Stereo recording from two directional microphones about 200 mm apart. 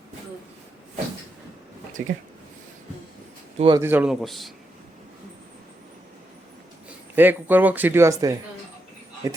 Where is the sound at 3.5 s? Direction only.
25° right (ahead or behind).